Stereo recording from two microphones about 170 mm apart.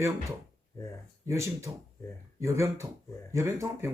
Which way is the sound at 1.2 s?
15° right (ahead or behind).